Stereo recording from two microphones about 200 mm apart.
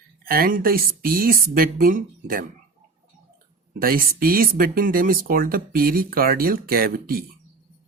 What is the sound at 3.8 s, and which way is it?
Speech, 45° right (ahead or behind).